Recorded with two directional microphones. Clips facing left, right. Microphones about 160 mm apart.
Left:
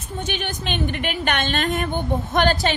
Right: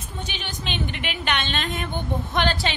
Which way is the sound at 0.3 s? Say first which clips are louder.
Left 6 dB; 50° left (ahead or behind).